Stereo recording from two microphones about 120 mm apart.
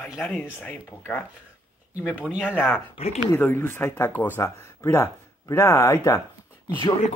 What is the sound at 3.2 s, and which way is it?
Speech, 20° left (ahead or behind).